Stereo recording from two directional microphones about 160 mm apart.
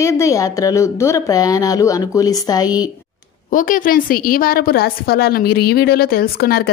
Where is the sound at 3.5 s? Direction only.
55° left (ahead or behind); by 6.6 s 75° left (ahead or behind).